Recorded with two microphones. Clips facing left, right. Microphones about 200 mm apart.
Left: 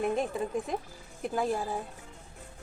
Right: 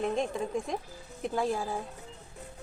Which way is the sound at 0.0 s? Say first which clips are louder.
Left 1 dB; 5° left (ahead or behind).